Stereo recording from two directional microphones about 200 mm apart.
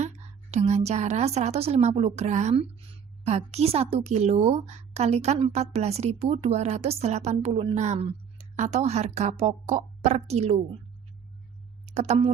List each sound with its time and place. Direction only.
0.5 s a woman's voice: 35° right (ahead or behind)
11.9 s speech: 35° right (ahead or behind)